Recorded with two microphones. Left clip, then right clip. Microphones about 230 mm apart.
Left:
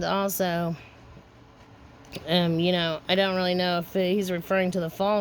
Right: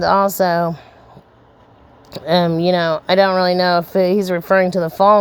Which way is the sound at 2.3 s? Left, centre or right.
Centre.